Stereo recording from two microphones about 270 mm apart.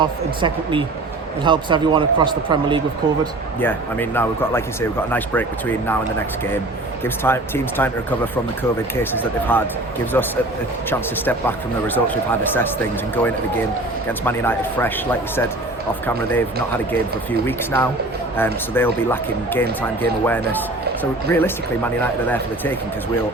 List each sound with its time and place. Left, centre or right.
0.0 s speech: centre
3.6 s a man's voice: centre
7.0 s a man's voice: centre
9.5 s a man's voice: centre
10.8 s a man's voice: centre